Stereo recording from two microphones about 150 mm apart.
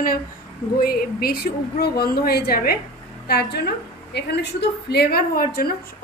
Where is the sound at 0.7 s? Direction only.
80° left.